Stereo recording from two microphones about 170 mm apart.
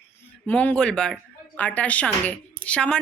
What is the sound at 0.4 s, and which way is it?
Speech, 10° left (ahead or behind).